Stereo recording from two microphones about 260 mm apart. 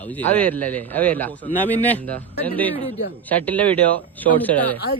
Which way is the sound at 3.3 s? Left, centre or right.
Centre.